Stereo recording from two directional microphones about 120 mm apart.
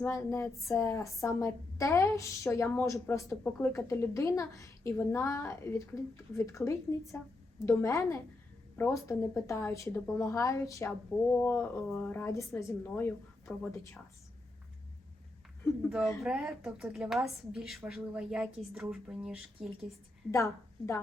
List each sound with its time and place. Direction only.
0.0 s a woman's voice: 25° left (ahead or behind)
11.3 s a woman's voice: 15° left (ahead or behind)
15.9 s a woman's voice: 5° right (ahead or behind)
20.3 s a woman's voice: 25° left (ahead or behind)